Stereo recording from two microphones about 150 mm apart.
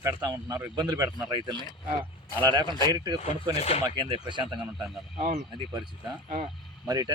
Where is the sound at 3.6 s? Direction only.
45° left (ahead or behind).